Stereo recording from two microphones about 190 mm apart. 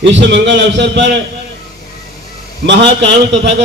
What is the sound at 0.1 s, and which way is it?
A man's voice, 70° right (ahead or behind).